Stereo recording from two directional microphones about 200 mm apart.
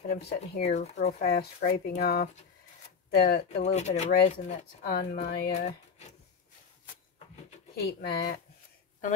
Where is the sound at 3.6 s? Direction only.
35° left (ahead or behind).